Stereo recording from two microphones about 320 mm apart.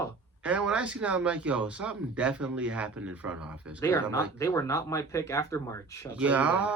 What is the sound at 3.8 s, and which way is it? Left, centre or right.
Speech, centre.